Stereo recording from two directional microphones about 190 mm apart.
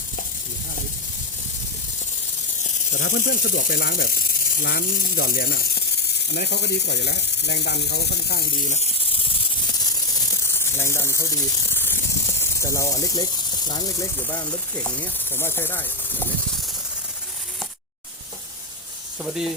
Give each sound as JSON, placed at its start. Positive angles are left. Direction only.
{"t": 2.6, "sound": "speech", "side_deg": 45}
{"t": 10.4, "sound": "snake", "side_deg": 15}
{"t": 13.7, "sound": "speech", "side_deg": 20}
{"t": 19.2, "sound": "speech", "side_deg": 0}